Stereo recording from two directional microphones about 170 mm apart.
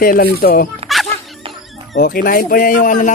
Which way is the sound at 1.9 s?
60° left (ahead or behind).